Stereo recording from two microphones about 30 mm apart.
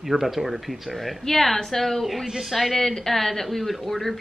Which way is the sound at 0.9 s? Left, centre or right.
Centre.